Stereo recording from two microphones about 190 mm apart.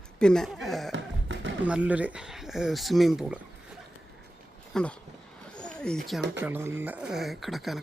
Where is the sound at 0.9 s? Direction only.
75° right (ahead or behind).